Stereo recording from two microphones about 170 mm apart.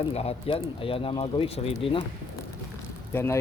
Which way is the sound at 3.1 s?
15° left (ahead or behind).